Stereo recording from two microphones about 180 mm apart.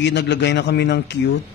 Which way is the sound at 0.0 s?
75° left (ahead or behind).